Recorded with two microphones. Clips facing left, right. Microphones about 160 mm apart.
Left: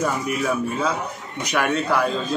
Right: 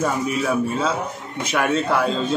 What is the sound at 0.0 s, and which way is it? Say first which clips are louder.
A man's voice: right 1 dB; centre (ahead or behind).